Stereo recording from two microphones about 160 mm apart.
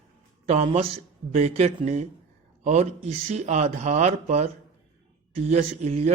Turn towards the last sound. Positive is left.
turn(degrees=-45)  # may be behind; listen again after turning